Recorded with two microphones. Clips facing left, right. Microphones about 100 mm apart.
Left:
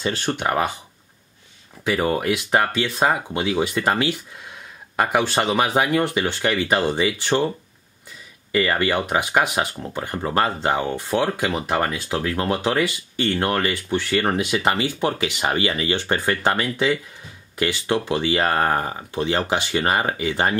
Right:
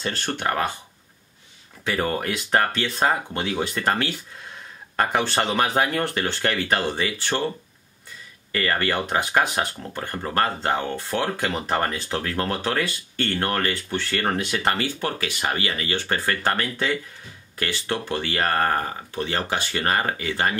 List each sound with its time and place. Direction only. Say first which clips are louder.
0.0 s speech: left 3 dB; 15° left (ahead or behind)
1.9 s speech: left 4 dB; 10° left (ahead or behind)
8.5 s speech: left 4 dB; 15° left (ahead or behind)